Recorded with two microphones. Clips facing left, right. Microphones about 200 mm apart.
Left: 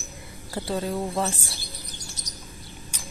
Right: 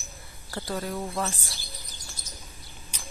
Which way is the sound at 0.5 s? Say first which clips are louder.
Left 4 dB; 25° left (ahead or behind).